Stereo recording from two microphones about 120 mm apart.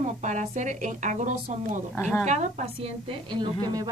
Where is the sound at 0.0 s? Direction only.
90° right.